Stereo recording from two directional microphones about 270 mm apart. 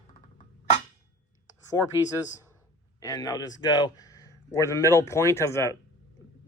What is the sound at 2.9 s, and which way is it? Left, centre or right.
Speech, centre.